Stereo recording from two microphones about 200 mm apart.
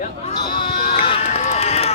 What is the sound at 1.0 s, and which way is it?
Run, 30° left (ahead or behind).